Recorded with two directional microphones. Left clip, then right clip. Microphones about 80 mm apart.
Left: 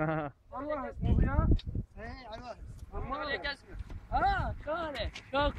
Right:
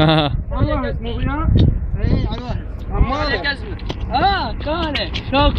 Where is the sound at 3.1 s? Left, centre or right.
Left.